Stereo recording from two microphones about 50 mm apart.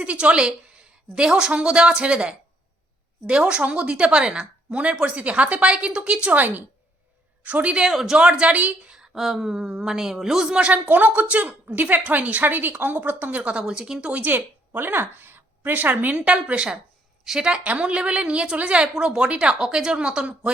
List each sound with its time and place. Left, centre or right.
0.0 s a woman's voice: right
7.4 s a woman's voice: right
7.9 s a woman's voice: centre; by 8.7 s right
9.1 s a woman's voice: centre
10.6 s a woman's voice: right
14.1 s a woman's voice: right
17.2 s a woman's voice: centre
17.5 s a woman's voice: right